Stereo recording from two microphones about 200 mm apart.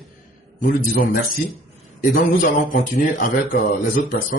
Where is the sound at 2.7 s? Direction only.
45° left (ahead or behind).